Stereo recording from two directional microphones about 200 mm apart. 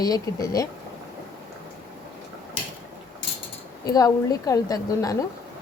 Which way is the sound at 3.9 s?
15° left (ahead or behind).